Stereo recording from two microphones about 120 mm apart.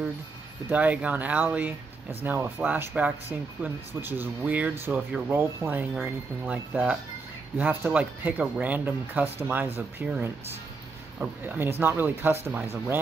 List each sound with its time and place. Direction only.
0.7 s speech: 15° right (ahead or behind)